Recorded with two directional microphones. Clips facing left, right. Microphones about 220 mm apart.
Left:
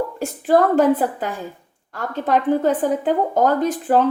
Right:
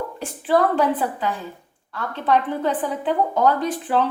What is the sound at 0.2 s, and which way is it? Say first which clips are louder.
A woman's voice: left 3 dB; 45° left (ahead or behind).